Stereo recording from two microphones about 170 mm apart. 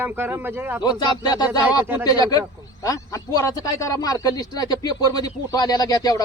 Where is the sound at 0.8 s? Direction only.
25° left (ahead or behind).